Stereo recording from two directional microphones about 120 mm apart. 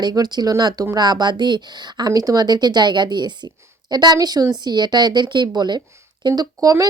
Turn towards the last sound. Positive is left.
turn(degrees=-30)  # may be behind; listen again after turning